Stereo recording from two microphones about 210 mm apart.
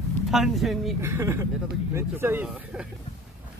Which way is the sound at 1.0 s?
10° right (ahead or behind).